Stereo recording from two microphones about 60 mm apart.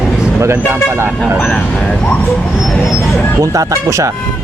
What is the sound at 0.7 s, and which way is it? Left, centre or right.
Speech, right.